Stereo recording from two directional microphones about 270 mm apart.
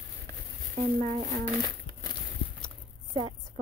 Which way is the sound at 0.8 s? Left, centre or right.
Right.